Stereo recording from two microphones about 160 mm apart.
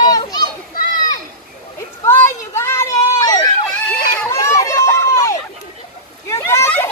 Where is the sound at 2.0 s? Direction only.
15° left (ahead or behind).